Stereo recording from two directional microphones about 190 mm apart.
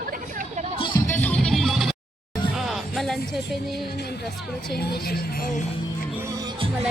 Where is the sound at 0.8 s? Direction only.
25° left (ahead or behind).